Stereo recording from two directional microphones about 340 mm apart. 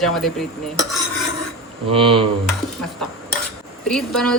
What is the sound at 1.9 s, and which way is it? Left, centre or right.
Speech, centre.